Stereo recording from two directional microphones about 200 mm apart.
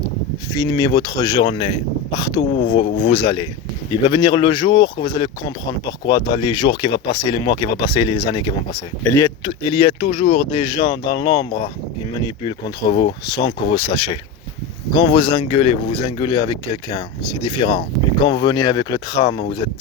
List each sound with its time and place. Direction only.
0.5 s speech: 20° left (ahead or behind)